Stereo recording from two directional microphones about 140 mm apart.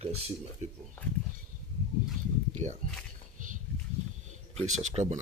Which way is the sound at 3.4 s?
70° right (ahead or behind).